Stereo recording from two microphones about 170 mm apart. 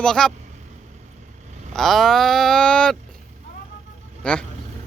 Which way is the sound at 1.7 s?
Centre (ahead or behind).